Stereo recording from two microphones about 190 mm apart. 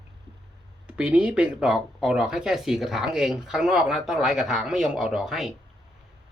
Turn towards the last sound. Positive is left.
turn(degrees=-5)  # may be behind; listen again after turning